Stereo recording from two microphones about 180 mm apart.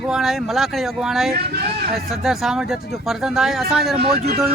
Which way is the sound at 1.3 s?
60° right (ahead or behind).